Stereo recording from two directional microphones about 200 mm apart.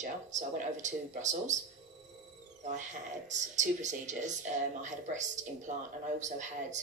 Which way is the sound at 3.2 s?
35° right (ahead or behind).